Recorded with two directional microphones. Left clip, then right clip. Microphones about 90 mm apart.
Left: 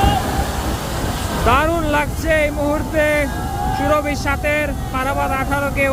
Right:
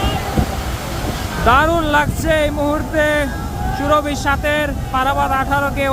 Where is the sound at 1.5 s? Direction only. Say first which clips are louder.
Right 3 dB; 45° right (ahead or behind).